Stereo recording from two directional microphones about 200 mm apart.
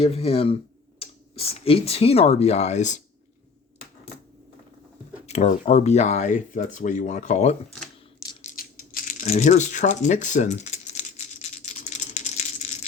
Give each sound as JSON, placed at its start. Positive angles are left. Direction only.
{"t": 0.0, "sound": "speech", "side_deg": 30}
{"t": 5.2, "sound": "speech", "side_deg": 35}
{"t": 8.4, "sound": "a sound", "side_deg": 45}